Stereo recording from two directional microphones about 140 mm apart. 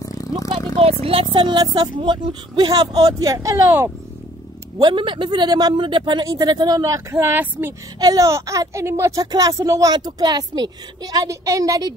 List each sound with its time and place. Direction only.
0.7 s a woman's voice: 45° right (ahead or behind); by 3.9 s 20° right (ahead or behind)
4.7 s speech: 35° right (ahead or behind)